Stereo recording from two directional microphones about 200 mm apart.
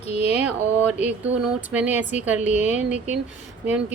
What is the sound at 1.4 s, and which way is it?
A woman's voice, 5° right (ahead or behind).